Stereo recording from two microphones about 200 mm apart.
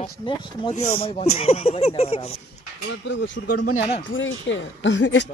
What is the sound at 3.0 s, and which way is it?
Speech, 65° left (ahead or behind).